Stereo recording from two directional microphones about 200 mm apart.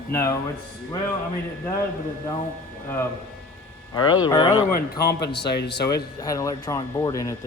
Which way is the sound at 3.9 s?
20° left (ahead or behind).